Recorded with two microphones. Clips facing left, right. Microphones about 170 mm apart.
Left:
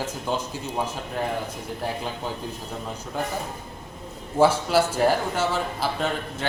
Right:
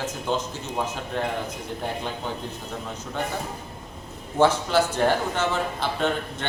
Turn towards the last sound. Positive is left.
turn(degrees=5)  # may be behind; listen again after turning